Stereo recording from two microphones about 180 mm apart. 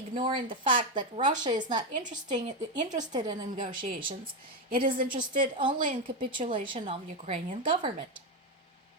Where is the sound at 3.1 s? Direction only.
25° right (ahead or behind).